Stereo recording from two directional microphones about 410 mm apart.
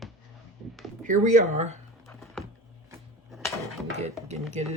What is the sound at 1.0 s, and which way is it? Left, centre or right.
Speech, centre.